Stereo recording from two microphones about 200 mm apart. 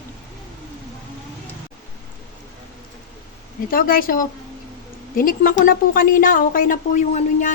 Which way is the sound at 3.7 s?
45° left (ahead or behind).